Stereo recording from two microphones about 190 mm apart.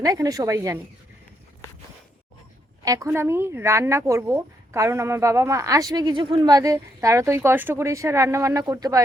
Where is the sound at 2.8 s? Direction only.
15° right (ahead or behind).